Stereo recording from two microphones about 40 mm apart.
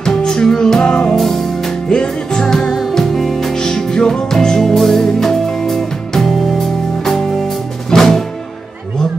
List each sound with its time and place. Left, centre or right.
0.0 s music: centre
1.1 s music: centre
1.9 s music: centre
3.5 s music: centre